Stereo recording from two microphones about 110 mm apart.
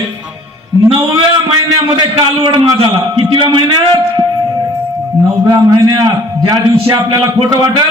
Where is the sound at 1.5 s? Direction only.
40° right (ahead or behind).